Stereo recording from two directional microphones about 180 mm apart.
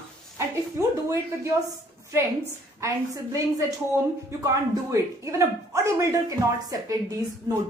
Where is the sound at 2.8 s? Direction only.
15° right (ahead or behind).